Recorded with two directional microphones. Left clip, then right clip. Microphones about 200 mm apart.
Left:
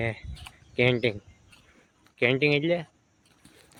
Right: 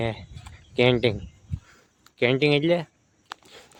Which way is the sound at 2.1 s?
30° right (ahead or behind).